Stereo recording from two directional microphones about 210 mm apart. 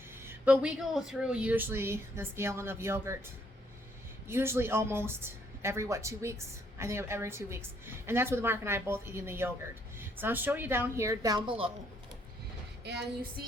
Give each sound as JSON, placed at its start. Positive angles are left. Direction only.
{"t": 0.3, "sound": "speech", "side_deg": -5}
{"t": 4.3, "sound": "speech", "side_deg": -10}
{"t": 12.8, "sound": "a sound", "side_deg": -50}